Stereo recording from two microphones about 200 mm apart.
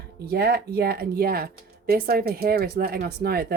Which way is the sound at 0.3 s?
50° right (ahead or behind).